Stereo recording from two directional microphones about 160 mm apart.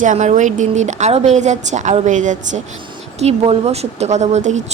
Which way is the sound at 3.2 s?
40° right (ahead or behind).